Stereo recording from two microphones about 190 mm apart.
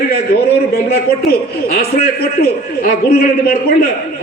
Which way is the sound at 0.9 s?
55° left (ahead or behind).